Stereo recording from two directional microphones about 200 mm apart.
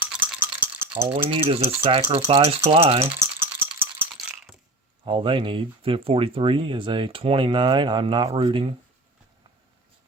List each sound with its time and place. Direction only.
0.0 s rattle: 10° right (ahead or behind)
1.1 s speech: 25° right (ahead or behind)
3.2 s rattle: 10° right (ahead or behind)
5.0 s speech: 25° right (ahead or behind)